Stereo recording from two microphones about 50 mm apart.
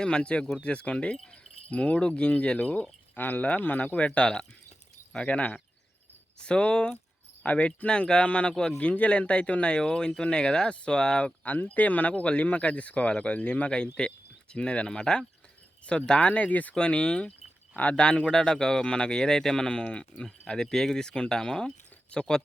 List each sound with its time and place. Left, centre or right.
0.0 s speech: centre
3.2 s speech: left; by 11.3 s centre
11.4 s speech: left
16.7 s speech: centre
20.5 s speech: centre